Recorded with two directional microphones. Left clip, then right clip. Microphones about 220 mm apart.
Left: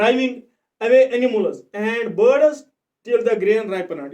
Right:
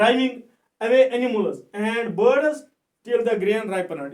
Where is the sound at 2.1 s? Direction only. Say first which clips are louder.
Left 4 dB; 10° right (ahead or behind).